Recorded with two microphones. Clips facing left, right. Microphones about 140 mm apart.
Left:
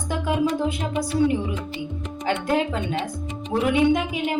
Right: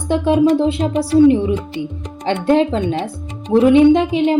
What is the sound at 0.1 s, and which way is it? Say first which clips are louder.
Speech: right 10 dB; 30° right (ahead or behind).